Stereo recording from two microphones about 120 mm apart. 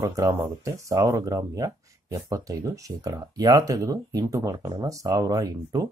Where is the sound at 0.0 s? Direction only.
25° right (ahead or behind).